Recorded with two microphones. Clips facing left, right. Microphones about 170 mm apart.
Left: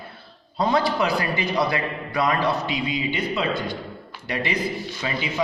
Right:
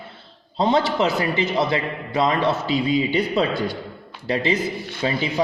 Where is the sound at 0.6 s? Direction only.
25° right (ahead or behind).